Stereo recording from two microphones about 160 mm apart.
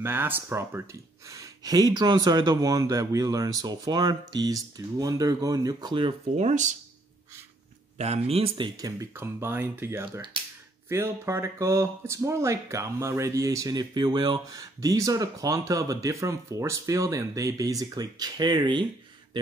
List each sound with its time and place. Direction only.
0.0 s speech: 15° right (ahead or behind); by 6.1 s 30° right (ahead or behind)
6.3 s speech: 50° right (ahead or behind)
8.0 s speech: 40° right (ahead or behind)